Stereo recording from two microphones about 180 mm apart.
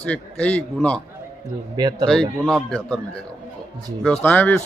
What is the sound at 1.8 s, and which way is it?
Speech, 20° right (ahead or behind).